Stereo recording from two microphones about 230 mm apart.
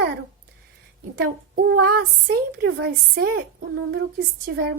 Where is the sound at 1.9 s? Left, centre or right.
Right.